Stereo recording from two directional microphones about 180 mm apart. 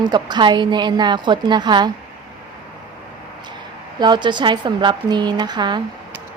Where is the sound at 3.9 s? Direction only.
25° right (ahead or behind).